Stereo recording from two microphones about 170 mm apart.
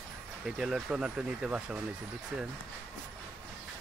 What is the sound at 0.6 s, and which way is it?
Speech, 5° right (ahead or behind).